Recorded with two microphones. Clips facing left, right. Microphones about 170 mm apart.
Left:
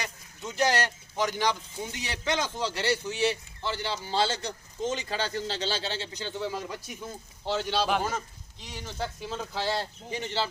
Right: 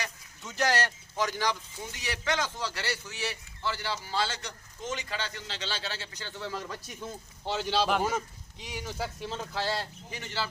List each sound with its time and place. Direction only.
0.0 s a sound: 20° left (ahead or behind)
1.2 s speech: 20° left (ahead or behind)
7.6 s a man's voice: centre (ahead or behind)
9.6 s speech: 20° left (ahead or behind)